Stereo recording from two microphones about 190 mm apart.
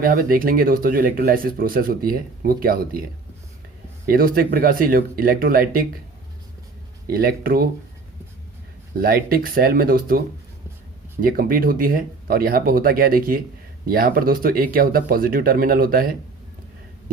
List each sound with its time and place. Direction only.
0.0 s speech: 50° right (ahead or behind)
4.0 s speech: 50° right (ahead or behind)
7.1 s speech: 50° right (ahead or behind)
9.0 s speech: 50° right (ahead or behind)
11.2 s speech: 50° right (ahead or behind)